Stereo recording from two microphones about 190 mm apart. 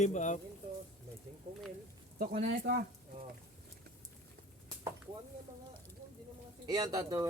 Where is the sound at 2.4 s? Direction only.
55° right (ahead or behind).